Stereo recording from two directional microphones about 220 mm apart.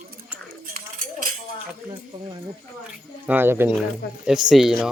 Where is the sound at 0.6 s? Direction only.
40° right (ahead or behind).